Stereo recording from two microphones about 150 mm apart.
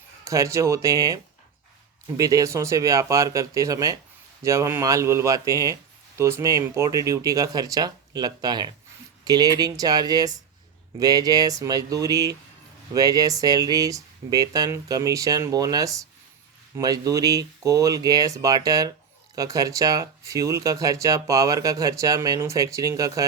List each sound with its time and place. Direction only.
0.3 s speech: 20° right (ahead or behind)